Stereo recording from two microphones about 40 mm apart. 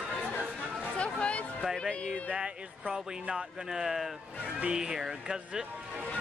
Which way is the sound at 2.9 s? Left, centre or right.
Centre.